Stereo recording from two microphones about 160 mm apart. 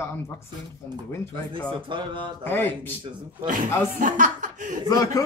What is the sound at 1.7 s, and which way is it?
Speech, 30° right (ahead or behind).